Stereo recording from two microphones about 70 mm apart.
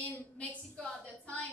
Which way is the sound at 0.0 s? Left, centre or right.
Left.